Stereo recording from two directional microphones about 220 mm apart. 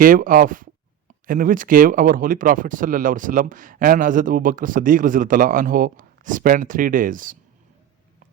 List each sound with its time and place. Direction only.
0.0 s speech: 40° right (ahead or behind)